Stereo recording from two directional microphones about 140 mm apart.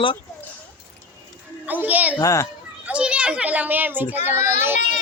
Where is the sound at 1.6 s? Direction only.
10° right (ahead or behind).